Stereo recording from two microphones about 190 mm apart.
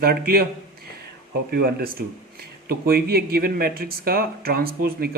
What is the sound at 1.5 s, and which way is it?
Speech, 55° right (ahead or behind).